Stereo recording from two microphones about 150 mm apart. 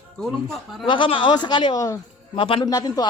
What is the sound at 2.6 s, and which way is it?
Speech, 25° left (ahead or behind).